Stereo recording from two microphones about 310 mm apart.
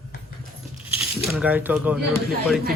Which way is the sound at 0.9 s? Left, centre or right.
Centre.